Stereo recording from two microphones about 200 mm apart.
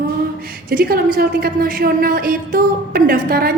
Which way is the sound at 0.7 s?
45° right (ahead or behind).